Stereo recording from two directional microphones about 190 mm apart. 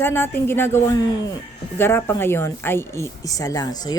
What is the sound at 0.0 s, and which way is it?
A woman's voice, 10° left (ahead or behind).